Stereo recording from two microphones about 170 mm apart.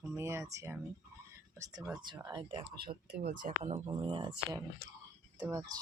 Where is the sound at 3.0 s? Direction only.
75° right (ahead or behind).